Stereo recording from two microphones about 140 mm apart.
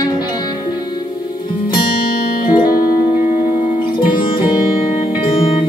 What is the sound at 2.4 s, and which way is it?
Music, 85° left.